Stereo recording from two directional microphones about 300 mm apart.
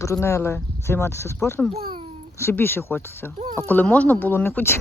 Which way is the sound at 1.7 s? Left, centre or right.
Centre.